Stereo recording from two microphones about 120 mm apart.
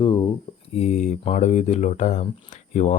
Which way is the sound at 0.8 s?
70° left (ahead or behind).